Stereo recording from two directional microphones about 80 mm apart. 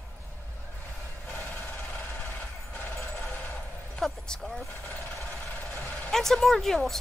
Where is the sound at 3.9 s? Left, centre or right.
Centre.